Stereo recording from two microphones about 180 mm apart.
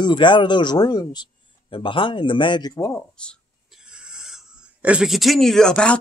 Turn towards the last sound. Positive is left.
turn(degrees=5)  # may be behind; listen again after turning